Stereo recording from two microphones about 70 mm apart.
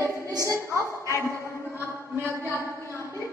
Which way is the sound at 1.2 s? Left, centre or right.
Left.